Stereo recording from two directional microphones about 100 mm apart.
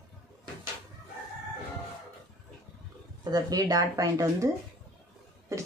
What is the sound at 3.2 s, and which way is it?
Speech, 40° right (ahead or behind).